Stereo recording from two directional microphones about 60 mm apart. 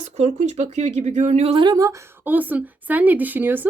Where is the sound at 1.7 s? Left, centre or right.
Right.